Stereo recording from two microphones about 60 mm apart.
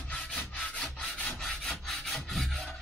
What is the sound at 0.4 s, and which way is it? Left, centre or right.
Wood, left.